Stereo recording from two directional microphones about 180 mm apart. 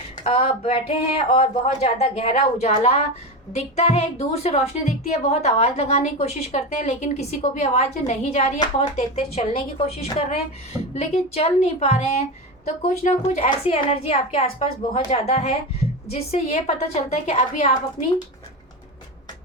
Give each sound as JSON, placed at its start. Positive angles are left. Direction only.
{"t": 0.3, "sound": "a woman's voice", "side_deg": 35}